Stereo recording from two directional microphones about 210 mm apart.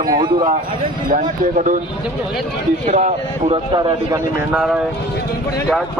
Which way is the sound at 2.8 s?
30° right (ahead or behind).